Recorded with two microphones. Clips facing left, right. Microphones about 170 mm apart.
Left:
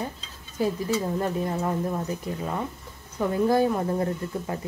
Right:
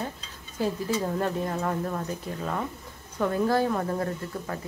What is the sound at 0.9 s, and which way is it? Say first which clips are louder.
Speech: left 1 dB; 10° left (ahead or behind).